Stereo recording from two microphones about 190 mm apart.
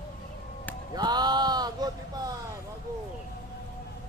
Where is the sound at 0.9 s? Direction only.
20° right (ahead or behind).